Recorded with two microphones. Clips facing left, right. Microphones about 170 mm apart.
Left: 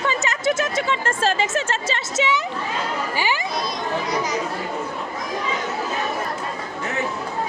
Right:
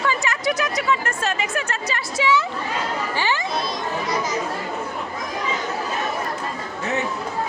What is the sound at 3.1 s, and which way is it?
Chatter, 15° left (ahead or behind).